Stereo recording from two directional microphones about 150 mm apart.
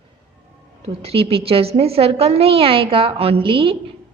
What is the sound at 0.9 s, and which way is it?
A woman's voice, 45° right (ahead or behind).